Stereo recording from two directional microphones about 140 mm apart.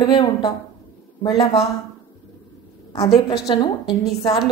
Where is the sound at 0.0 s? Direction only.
35° left (ahead or behind).